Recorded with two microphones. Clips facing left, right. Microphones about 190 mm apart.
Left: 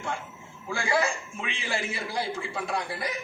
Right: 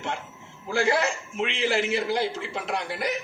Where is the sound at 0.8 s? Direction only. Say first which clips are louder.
Right 4 dB; 70° right (ahead or behind).